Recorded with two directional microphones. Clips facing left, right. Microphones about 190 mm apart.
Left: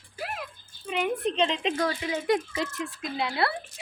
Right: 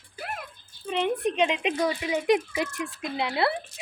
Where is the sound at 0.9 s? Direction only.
30° right (ahead or behind).